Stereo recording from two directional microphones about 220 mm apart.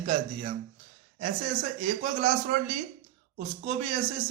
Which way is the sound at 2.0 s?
35° right (ahead or behind).